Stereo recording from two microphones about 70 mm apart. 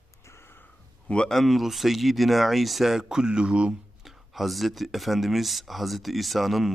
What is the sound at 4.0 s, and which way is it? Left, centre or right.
Speech, centre.